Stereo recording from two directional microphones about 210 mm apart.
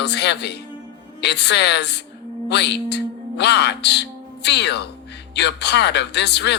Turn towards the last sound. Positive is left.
turn(degrees=55)  # may be behind; listen again after turning